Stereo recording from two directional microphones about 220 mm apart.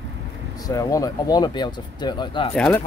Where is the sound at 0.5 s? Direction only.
15° left (ahead or behind).